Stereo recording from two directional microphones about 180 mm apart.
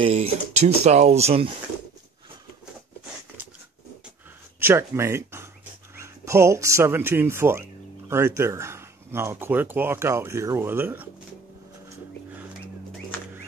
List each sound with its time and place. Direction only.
0.0 s speech: 35° right (ahead or behind)
4.6 s speech: 15° right (ahead or behind)